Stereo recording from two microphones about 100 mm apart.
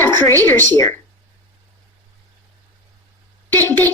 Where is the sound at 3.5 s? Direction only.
25° left (ahead or behind).